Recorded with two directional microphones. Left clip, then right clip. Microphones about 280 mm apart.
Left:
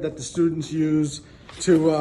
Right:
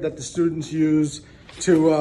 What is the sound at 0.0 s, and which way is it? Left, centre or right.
Speech, centre.